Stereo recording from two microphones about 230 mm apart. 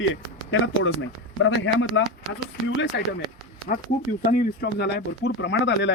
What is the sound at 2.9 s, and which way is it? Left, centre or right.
Speech, left.